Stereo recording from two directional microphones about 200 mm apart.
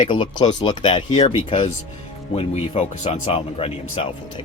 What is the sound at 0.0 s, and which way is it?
Speech, 25° left (ahead or behind).